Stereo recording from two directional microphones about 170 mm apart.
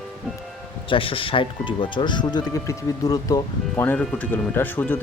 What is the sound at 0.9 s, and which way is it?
Speech, 30° left (ahead or behind).